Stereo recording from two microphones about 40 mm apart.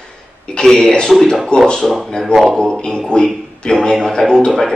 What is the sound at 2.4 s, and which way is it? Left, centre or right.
A man's voice, centre.